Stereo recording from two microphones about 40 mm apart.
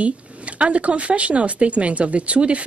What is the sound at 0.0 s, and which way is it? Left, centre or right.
A woman's voice, right.